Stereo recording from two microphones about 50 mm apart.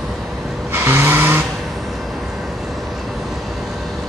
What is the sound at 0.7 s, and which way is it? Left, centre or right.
Vehicle, right.